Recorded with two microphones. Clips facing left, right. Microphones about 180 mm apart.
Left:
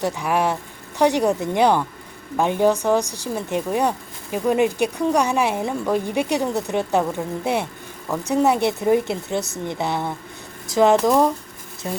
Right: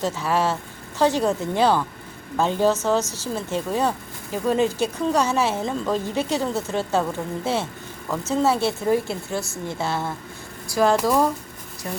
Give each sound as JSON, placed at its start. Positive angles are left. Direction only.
{"t": 0.0, "sound": "speech", "side_deg": 15}